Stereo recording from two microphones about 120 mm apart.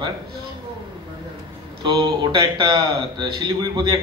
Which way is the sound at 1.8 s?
40° right (ahead or behind).